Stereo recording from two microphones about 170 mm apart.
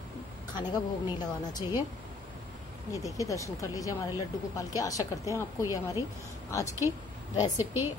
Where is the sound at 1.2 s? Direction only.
25° left (ahead or behind).